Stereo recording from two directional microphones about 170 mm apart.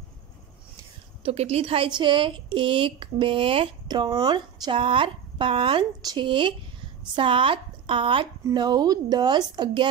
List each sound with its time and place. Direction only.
1.2 s a woman's voice: 35° right (ahead or behind)